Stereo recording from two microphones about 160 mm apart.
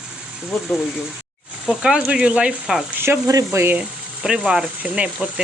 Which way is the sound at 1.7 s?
5° right (ahead or behind).